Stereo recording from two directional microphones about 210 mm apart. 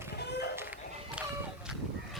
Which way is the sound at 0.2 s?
55° left (ahead or behind).